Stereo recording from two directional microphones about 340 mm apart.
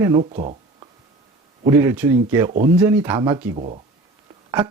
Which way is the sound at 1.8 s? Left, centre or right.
Centre.